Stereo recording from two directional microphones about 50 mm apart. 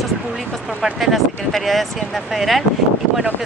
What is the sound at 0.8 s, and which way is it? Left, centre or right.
Speech, centre.